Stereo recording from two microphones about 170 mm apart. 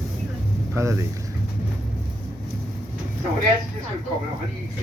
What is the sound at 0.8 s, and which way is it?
Speech, 15° right (ahead or behind).